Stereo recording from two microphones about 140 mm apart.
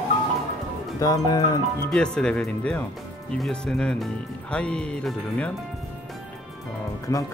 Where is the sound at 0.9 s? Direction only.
25° left (ahead or behind).